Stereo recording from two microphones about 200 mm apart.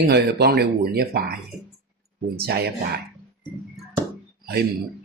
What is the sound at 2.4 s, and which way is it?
Speech, 50° right (ahead or behind).